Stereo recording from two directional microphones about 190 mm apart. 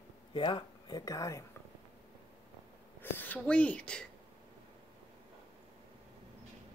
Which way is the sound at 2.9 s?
10° left (ahead or behind).